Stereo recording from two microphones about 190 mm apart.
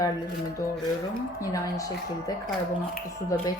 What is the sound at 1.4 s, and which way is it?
A woman's voice, 15° left (ahead or behind).